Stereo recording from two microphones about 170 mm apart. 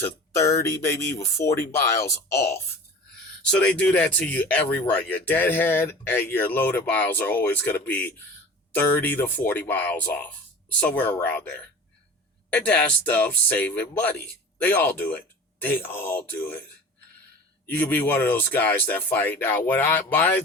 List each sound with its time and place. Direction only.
0.0 s speech: 15° left (ahead or behind)
17.7 s speech: 10° left (ahead or behind)